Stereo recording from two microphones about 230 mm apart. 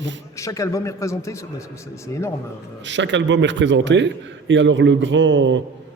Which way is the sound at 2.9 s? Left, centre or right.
Right.